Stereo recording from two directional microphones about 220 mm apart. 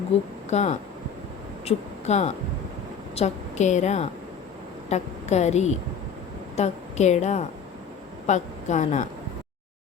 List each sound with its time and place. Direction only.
0.5 s a woman's voice: 30° left (ahead or behind)